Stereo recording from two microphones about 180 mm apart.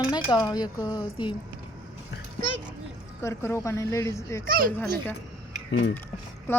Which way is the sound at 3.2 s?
15° left (ahead or behind).